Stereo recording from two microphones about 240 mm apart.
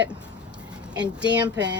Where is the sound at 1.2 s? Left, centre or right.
Centre.